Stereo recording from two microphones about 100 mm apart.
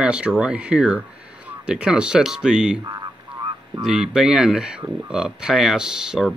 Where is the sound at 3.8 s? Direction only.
5° right (ahead or behind).